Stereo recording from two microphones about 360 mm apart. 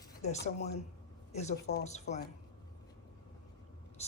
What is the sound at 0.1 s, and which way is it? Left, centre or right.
Speech, centre.